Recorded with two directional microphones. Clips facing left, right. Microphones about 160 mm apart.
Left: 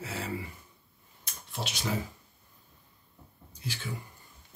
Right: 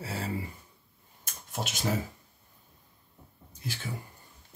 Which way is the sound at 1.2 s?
45° right (ahead or behind).